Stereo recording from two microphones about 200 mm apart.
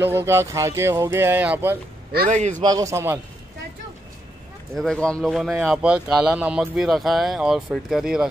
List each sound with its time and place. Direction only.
0.0 s speech: 10° right (ahead or behind)
2.1 s a man's voice: 35° right (ahead or behind)
2.6 s speech: 20° right (ahead or behind)
4.7 s speech: 5° left (ahead or behind)